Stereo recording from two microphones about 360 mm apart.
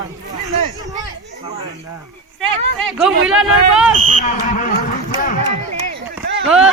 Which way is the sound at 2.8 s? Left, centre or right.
Centre.